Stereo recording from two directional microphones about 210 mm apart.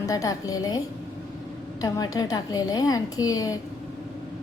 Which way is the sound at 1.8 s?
15° left (ahead or behind).